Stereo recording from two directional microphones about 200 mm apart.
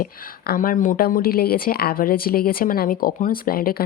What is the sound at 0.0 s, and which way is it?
A woman's voice, 45° left (ahead or behind).